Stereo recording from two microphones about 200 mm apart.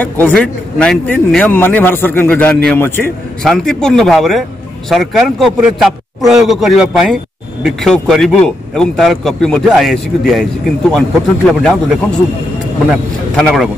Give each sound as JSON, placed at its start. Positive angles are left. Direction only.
{"t": 0.0, "sound": "a man's voice", "side_deg": 10}
{"t": 12.9, "sound": "a man's voice", "side_deg": 0}